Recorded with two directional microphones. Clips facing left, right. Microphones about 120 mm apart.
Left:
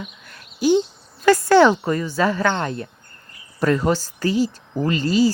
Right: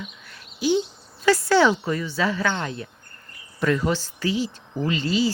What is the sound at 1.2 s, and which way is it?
Speech, 50° left (ahead or behind).